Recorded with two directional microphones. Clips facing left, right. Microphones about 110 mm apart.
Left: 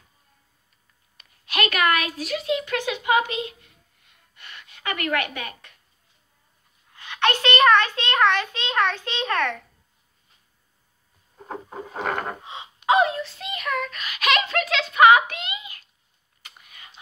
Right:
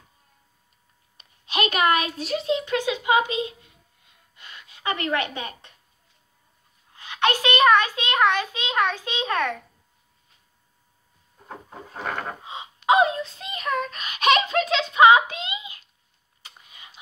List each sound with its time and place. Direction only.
1.1 s a sound: 25° right (ahead or behind)
2.0 s speech: 30° right (ahead or behind)
4.4 s gasp: 15° right (ahead or behind)
6.9 s a child's voice: 20° right (ahead or behind)
11.4 s wood: 50° left (ahead or behind)
12.4 s wail: 20° right (ahead or behind)
16.4 s a sound: 20° right (ahead or behind)